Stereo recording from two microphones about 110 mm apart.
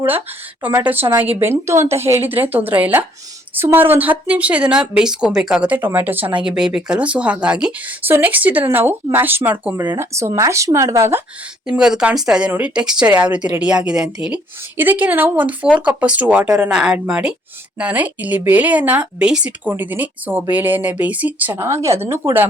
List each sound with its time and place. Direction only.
0.6 s a woman's voice: 15° right (ahead or behind)
6.4 s a woman's voice: 5° right (ahead or behind); by 11.2 s 25° right (ahead or behind)
11.6 s speech: 5° right (ahead or behind)